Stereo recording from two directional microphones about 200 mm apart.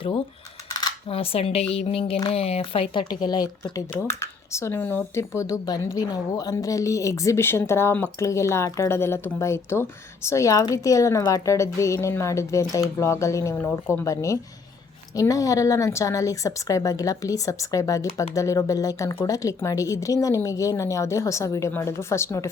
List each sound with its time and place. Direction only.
0.7 s speech: 20° left (ahead or behind)